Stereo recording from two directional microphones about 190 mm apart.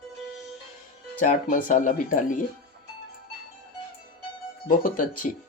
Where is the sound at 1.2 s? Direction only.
40° left (ahead or behind).